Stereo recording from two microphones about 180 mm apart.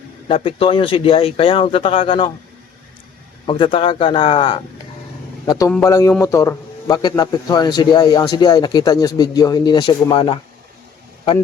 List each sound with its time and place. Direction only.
0.3 s a man's voice: 30° left (ahead or behind)
3.4 s a man's voice: 30° left (ahead or behind)